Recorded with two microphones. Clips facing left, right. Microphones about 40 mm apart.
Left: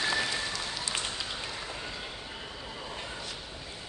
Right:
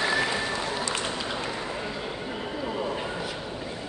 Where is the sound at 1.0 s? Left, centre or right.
Right.